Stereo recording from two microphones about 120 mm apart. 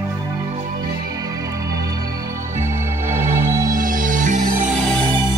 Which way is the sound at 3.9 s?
90° right.